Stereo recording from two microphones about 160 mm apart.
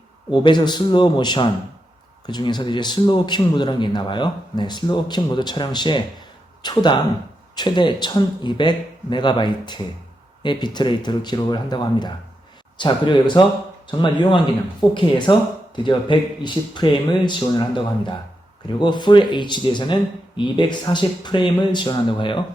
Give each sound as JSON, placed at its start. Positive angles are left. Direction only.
{"t": 0.3, "sound": "speech", "side_deg": 30}